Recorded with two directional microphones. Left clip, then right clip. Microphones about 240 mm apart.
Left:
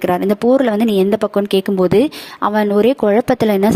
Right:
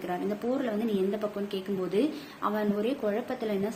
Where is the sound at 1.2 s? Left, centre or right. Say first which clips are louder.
Left 17 dB; left.